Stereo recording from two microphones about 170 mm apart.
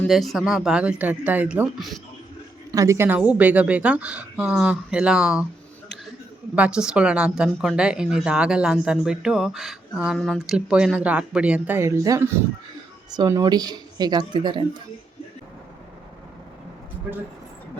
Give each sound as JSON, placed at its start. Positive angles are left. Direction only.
{"t": 0.1, "sound": "speech", "side_deg": 0}
{"t": 2.7, "sound": "a woman's voice", "side_deg": -15}
{"t": 6.6, "sound": "speech", "side_deg": -5}